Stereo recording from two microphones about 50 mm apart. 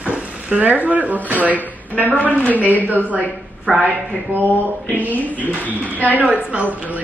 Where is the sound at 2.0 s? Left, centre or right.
Left.